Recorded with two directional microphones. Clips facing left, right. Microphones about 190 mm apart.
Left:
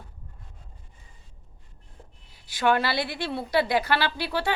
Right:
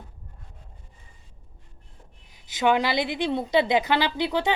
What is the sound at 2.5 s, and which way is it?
A woman's voice, 20° right (ahead or behind).